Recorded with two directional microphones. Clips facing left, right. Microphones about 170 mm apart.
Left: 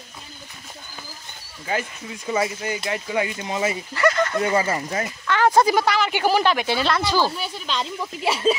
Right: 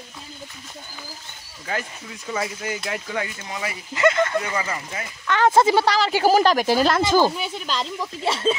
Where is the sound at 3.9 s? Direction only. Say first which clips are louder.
Right 3 dB; 20° right (ahead or behind).